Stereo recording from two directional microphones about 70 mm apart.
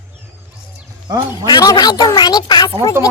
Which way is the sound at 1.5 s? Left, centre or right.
Left.